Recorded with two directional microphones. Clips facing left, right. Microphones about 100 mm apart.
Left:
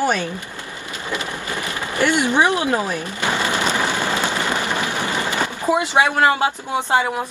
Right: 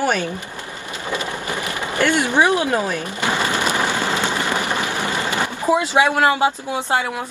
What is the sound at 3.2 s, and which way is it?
Sewing machine, 15° right (ahead or behind).